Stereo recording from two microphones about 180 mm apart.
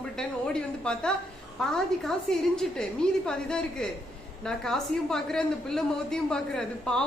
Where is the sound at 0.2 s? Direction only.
5° left (ahead or behind).